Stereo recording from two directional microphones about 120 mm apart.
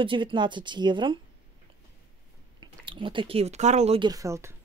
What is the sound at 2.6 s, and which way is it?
Speech, 45° right (ahead or behind).